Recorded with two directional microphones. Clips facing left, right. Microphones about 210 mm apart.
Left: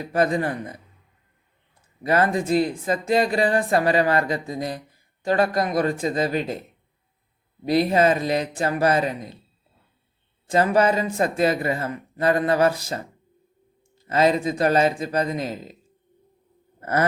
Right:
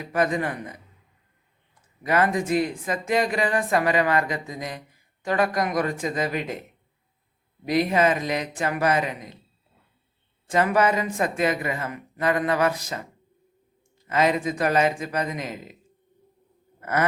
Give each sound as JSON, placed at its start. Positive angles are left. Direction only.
{"t": 0.0, "sound": "speech", "side_deg": 30}
{"t": 2.0, "sound": "speech", "side_deg": 30}
{"t": 7.6, "sound": "speech", "side_deg": 30}
{"t": 10.5, "sound": "speech", "side_deg": 30}
{"t": 14.1, "sound": "speech", "side_deg": 30}
{"t": 16.8, "sound": "a sound", "side_deg": 35}